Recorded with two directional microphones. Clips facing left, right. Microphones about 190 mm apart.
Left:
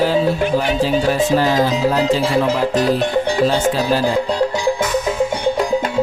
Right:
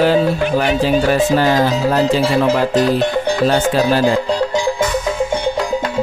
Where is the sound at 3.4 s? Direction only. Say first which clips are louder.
Right 2 dB; 65° right (ahead or behind).